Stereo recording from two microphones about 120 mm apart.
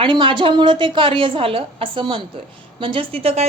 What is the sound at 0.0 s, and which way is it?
A woman's voice, 45° right (ahead or behind).